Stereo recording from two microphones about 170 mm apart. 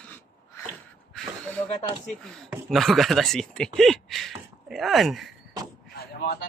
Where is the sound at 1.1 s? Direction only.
5° left (ahead or behind).